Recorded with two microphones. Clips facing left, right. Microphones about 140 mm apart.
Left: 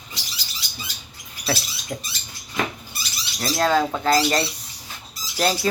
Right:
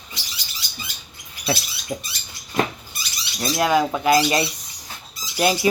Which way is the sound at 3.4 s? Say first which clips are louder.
Right 1 dB; 15° right (ahead or behind).